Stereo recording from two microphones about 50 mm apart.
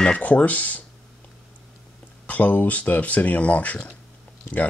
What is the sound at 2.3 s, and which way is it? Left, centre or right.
Speech, left.